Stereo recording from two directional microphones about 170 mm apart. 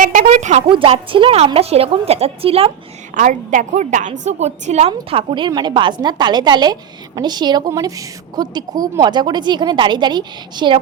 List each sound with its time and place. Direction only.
0.0 s a sound: 50° right (ahead or behind)
0.7 s a woman's voice: 30° right (ahead or behind)
3.2 s a woman's voice: 50° right (ahead or behind); by 10.8 s 25° right (ahead or behind)